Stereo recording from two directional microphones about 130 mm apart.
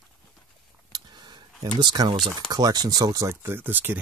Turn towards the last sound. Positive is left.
turn(degrees=-15)  # may be behind; listen again after turning